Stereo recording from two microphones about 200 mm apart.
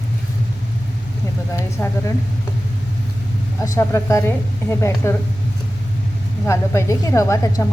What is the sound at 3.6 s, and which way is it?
A woman's voice, 15° left (ahead or behind).